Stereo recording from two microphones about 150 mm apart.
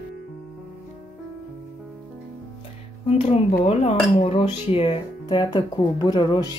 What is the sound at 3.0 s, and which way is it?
Speech, 45° left (ahead or behind).